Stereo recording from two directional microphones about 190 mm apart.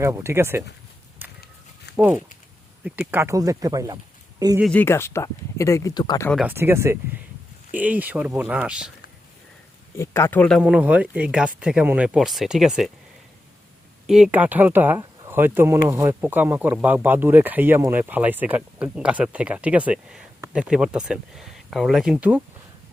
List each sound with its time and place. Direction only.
0.0 s speech: 15° right (ahead or behind)
2.0 s speech: 5° right (ahead or behind)
4.6 s speech: 10° left (ahead or behind)
6.3 s speech: 10° right (ahead or behind)
10.0 s speech: 15° left (ahead or behind)
10.6 s speech: 5° right (ahead or behind)
14.1 s speech: 5° right (ahead or behind)